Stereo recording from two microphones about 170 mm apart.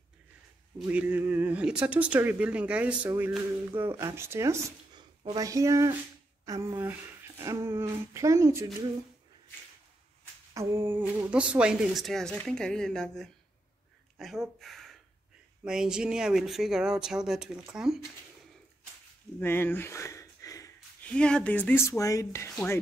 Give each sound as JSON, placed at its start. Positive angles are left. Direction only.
{"t": 0.7, "sound": "speech", "side_deg": -10}
{"t": 10.5, "sound": "speech", "side_deg": -15}
{"t": 19.4, "sound": "a sound", "side_deg": 10}
{"t": 21.0, "sound": "speech", "side_deg": 5}